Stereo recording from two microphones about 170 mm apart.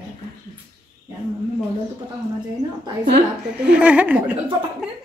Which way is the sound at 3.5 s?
5° right (ahead or behind).